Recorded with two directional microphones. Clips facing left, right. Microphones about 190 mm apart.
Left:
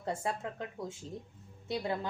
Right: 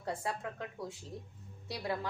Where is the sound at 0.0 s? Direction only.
25° left (ahead or behind).